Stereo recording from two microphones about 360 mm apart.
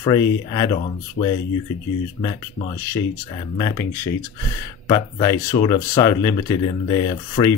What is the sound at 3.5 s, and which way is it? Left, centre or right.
Speech, centre.